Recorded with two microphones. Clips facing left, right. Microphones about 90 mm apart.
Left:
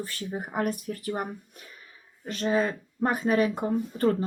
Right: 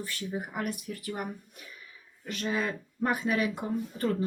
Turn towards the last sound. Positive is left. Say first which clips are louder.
# left 5 dB
turn(degrees=40)  # may be behind; listen again after turning